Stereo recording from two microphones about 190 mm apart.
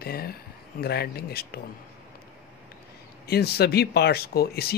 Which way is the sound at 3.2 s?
55° left (ahead or behind).